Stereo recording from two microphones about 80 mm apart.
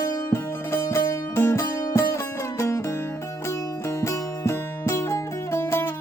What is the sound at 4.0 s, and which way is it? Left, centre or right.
Music, left.